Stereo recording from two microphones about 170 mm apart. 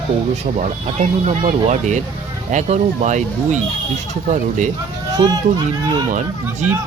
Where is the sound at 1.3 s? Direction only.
45° right (ahead or behind).